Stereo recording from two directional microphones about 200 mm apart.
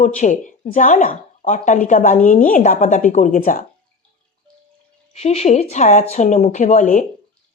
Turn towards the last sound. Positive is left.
turn(degrees=40)  # may be behind; listen again after turning